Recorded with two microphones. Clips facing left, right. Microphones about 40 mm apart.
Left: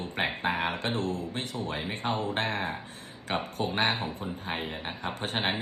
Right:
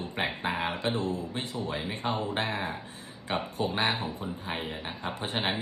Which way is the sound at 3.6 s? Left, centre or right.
Left.